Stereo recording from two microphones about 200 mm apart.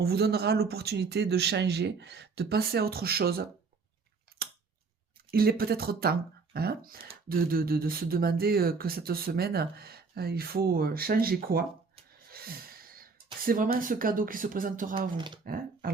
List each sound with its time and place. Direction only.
0.0 s speech: 50° right (ahead or behind)
5.3 s speech: 50° right (ahead or behind)
12.3 s a sound: 50° right (ahead or behind)
13.7 s speech: 45° right (ahead or behind)
15.1 s speech: 25° right (ahead or behind)
15.4 s speech: 45° right (ahead or behind)